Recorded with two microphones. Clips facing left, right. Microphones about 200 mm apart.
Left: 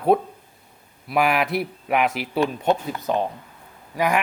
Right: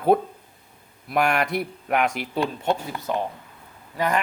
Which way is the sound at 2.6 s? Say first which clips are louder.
Left 3 dB; 15° left (ahead or behind).